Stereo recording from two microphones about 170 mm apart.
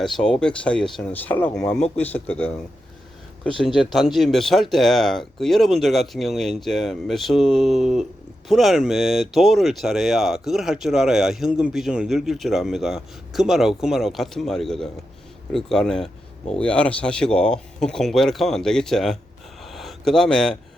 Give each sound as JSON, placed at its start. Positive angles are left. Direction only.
{"t": 0.0, "sound": "speech", "side_deg": 0}
{"t": 3.6, "sound": "speech", "side_deg": 0}
{"t": 19.6, "sound": "a sound", "side_deg": 0}